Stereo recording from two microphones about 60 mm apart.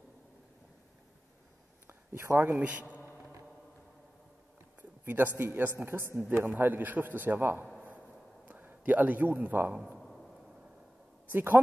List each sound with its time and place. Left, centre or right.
1.9 s speech: right
2.6 s a man's voice: right
5.0 s a man's voice: right
6.5 s a man's voice: right
9.9 s a sound: centre
11.3 s a man's voice: right